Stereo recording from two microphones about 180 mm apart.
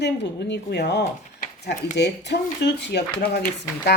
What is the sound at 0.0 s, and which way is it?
Speech, 75° left (ahead or behind).